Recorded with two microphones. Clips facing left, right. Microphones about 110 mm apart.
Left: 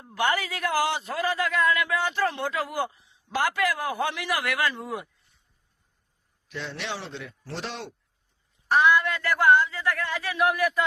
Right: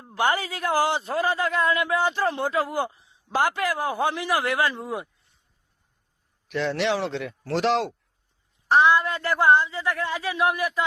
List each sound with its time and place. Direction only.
0.1 s a man's voice: 30° right (ahead or behind)
6.5 s a man's voice: 75° right (ahead or behind); by 7.9 s 90° right
8.6 s a man's voice: 30° right (ahead or behind)